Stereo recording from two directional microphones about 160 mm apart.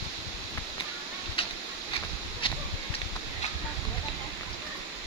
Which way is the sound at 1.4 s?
35° left (ahead or behind).